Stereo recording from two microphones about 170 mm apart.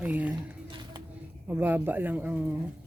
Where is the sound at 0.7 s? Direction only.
25° right (ahead or behind).